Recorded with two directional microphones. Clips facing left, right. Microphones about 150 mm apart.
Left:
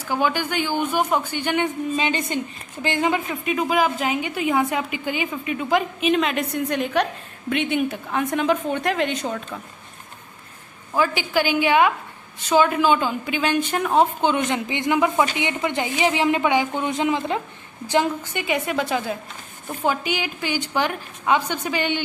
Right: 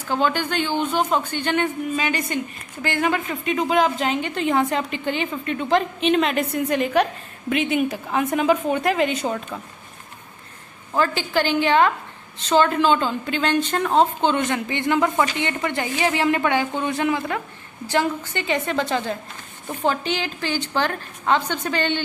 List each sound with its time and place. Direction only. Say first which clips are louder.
0.1 s a woman's voice: right 1 dB; 10° left (ahead or behind)
2.0 s a woman's voice: left 1 dB; 25° left (ahead or behind)
3.4 s a woman's voice: right 2 dB; 5° left (ahead or behind)
10.9 s a woman's voice: even; 10° left (ahead or behind)